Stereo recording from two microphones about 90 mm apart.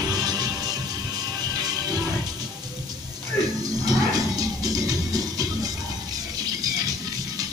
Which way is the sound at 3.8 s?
45° right (ahead or behind).